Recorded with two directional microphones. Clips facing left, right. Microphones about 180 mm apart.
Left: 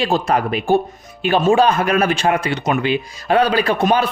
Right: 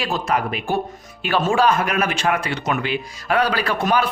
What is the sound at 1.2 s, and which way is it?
A man's voice, 20° left (ahead or behind).